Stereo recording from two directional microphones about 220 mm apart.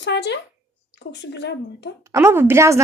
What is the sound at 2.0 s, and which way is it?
Speech, 10° right (ahead or behind).